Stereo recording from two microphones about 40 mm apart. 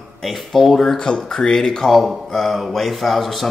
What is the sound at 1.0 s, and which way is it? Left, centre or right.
Speech, left.